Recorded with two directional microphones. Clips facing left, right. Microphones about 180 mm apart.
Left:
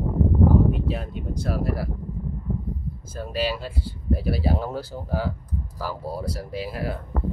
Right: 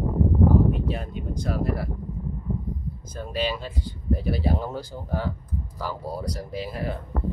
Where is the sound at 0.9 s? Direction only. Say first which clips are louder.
Left 1 dB; 5° left (ahead or behind).